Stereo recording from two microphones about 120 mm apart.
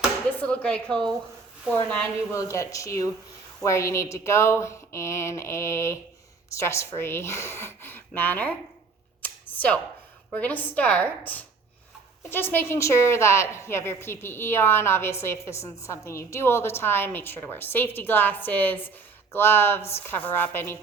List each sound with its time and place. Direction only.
0.3 s a woman's voice: 10° left (ahead or behind)
2.3 s a woman's voice: 25° left (ahead or behind)
9.2 s a sound: 10° left (ahead or behind)
10.3 s a woman's voice: 15° left (ahead or behind)